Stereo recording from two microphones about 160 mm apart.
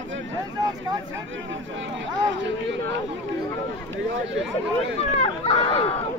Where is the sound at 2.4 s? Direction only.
90° right.